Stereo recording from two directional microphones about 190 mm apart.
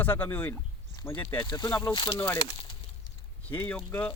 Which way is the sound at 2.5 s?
25° left (ahead or behind).